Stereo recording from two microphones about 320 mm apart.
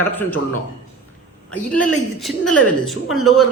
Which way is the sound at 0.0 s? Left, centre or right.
Centre.